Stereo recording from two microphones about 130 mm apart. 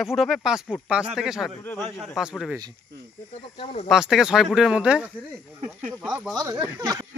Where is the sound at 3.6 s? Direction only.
55° left (ahead or behind).